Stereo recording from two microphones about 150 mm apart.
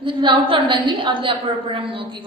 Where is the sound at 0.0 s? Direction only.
35° right (ahead or behind).